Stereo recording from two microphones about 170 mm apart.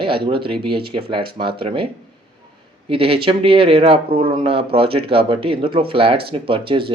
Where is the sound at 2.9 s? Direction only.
30° right (ahead or behind).